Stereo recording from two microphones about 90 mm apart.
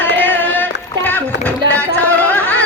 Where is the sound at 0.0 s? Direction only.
20° left (ahead or behind).